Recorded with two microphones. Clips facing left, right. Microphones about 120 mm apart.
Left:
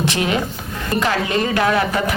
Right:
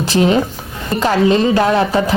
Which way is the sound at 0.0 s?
30° right (ahead or behind).